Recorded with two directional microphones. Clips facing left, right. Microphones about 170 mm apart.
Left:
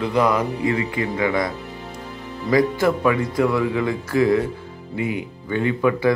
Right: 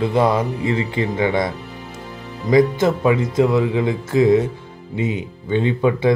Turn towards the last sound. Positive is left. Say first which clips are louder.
# right 2 dB
turn(degrees=-25)  # may be behind; listen again after turning